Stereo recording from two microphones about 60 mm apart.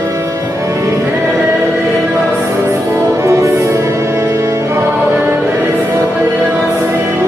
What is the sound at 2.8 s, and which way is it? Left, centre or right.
Music, right.